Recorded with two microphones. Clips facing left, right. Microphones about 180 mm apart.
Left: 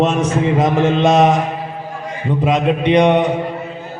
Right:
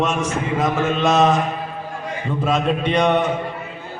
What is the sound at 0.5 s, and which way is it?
Speech, 25° left (ahead or behind).